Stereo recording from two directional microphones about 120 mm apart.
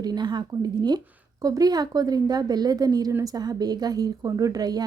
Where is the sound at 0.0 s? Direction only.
35° right (ahead or behind).